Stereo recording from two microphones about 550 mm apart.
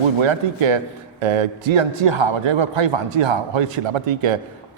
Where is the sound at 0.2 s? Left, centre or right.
Right.